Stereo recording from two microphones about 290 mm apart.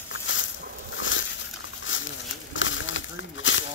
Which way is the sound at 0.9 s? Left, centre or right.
Left.